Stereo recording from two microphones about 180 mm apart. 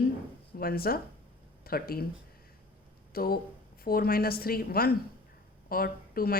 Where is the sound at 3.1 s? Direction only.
55° left (ahead or behind).